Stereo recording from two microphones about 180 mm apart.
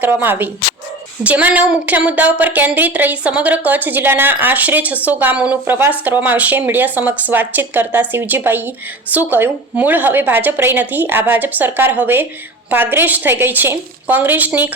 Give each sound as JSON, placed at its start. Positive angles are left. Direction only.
{"t": 0.0, "sound": "speech", "side_deg": -10}